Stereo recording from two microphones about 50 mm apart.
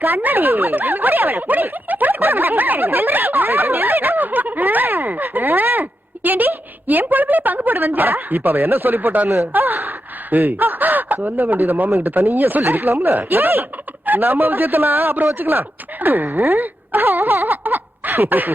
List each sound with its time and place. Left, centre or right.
0.0 s speech: right